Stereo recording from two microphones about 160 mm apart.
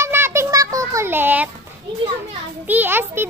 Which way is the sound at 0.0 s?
15° right (ahead or behind).